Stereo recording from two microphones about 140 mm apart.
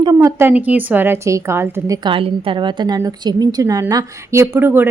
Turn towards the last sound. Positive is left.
turn(degrees=-15)  # may be behind; listen again after turning